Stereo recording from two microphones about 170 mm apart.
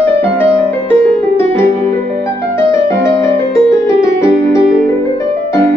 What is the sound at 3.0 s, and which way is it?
Music, 15° left (ahead or behind).